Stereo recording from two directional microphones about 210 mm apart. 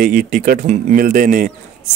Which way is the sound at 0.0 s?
40° right (ahead or behind).